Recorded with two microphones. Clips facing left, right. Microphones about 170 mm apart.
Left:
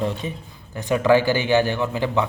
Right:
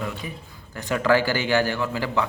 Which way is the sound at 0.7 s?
20° left (ahead or behind).